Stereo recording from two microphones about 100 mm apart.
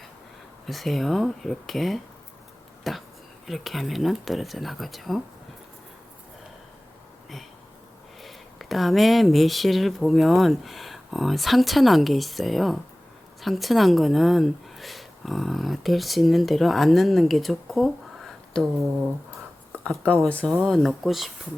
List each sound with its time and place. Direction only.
0.7 s speech: centre (ahead or behind)
8.2 s speech: centre (ahead or behind)
20.2 s speech: 15° left (ahead or behind)